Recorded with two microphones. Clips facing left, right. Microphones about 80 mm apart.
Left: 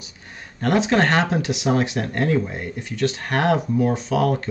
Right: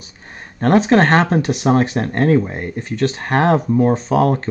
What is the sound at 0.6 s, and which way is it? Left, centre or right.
Speech, right.